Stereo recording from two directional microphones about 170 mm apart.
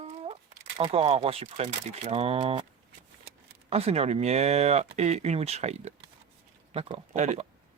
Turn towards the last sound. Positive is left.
turn(degrees=-45)  # may be behind; listen again after turning